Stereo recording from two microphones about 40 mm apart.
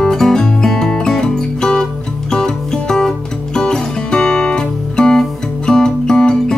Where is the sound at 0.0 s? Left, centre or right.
Centre.